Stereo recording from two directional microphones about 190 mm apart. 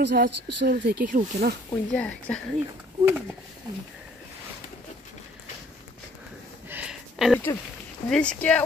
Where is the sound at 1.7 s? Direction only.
5° left (ahead or behind).